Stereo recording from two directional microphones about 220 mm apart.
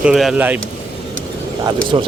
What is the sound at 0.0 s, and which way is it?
Speech, centre (ahead or behind).